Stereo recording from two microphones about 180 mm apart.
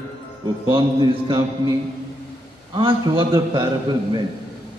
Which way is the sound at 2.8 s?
30° right (ahead or behind).